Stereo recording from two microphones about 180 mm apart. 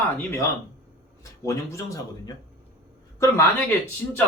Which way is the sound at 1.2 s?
15° left (ahead or behind).